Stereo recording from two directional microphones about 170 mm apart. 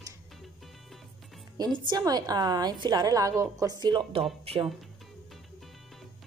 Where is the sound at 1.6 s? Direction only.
25° right (ahead or behind).